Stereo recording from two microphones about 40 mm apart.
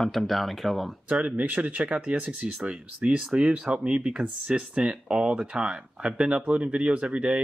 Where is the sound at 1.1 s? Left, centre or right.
Right.